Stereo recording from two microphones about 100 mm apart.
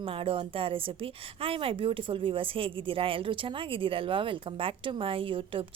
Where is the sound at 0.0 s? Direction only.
65° right (ahead or behind).